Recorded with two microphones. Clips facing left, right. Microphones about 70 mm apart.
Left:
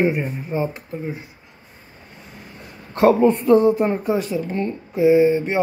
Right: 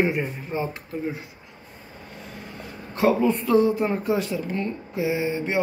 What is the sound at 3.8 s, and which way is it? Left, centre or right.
Speech, left.